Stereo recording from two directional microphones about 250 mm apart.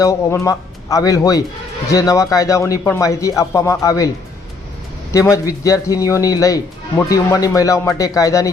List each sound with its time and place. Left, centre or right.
0.0 s speech: centre
5.1 s speech: centre